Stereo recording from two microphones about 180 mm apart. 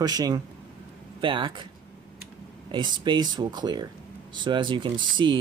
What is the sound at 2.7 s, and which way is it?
Speech, 25° right (ahead or behind).